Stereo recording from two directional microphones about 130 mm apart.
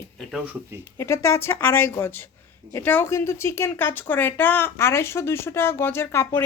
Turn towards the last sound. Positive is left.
turn(degrees=20)  # may be behind; listen again after turning